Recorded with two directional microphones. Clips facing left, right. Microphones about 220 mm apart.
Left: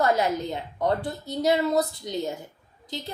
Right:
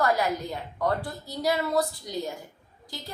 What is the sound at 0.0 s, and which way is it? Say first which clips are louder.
A woman's voice: left 2 dB; 20° left (ahead or behind).